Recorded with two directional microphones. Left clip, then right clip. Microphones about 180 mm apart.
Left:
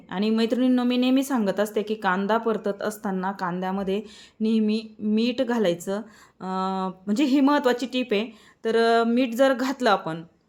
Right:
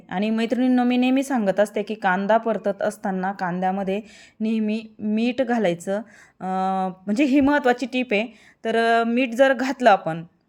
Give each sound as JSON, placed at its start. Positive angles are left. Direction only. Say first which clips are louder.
{"t": 0.1, "sound": "a woman's voice", "louder": "even", "side_deg": -15}